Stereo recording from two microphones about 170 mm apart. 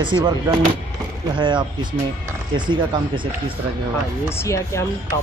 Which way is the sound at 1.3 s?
25° right (ahead or behind).